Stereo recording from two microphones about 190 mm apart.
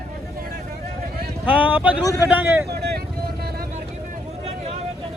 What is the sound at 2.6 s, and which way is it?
Vehicle, 60° right (ahead or behind).